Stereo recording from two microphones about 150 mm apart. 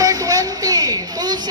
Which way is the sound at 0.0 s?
25° right (ahead or behind).